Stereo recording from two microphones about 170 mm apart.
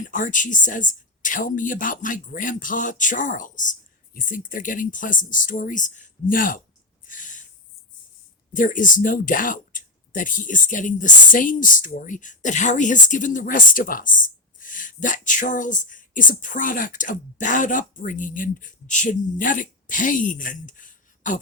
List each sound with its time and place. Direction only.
0.1 s speech: 50° left (ahead or behind)
7.1 s a sound: 50° left (ahead or behind)
8.5 s speech: 50° left (ahead or behind)